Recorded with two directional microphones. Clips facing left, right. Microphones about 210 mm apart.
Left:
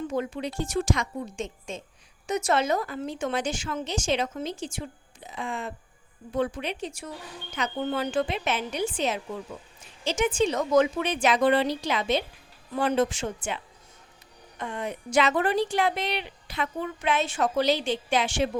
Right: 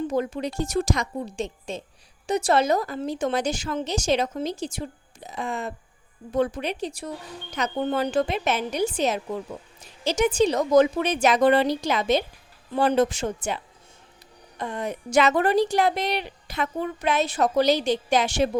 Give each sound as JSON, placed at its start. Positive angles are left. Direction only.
{"t": 0.1, "sound": "a woman's voice", "side_deg": -40}
{"t": 14.6, "sound": "a woman's voice", "side_deg": -40}